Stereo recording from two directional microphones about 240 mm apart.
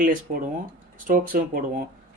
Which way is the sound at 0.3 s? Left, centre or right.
Right.